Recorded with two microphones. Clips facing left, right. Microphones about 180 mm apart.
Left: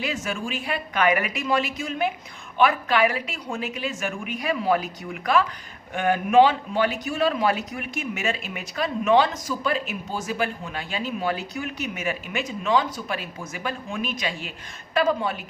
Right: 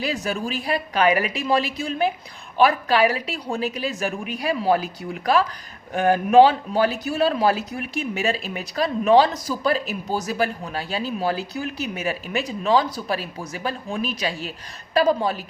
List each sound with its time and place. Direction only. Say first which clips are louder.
0.0 s a man's voice: right 3 dB; 35° right (ahead or behind)